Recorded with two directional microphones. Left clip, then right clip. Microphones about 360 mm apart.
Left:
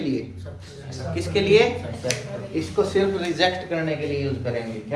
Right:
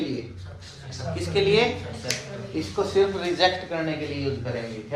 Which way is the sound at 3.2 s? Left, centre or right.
Centre.